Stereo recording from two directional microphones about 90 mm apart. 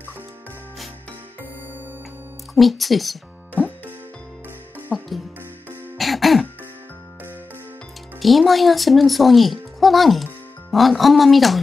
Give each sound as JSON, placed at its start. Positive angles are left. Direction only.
{"t": 2.5, "sound": "speech", "side_deg": 0}
{"t": 3.5, "sound": "music", "side_deg": -15}
{"t": 4.9, "sound": "music", "side_deg": 0}
{"t": 5.9, "sound": "throat clearing", "side_deg": 0}
{"t": 8.2, "sound": "speech", "side_deg": 0}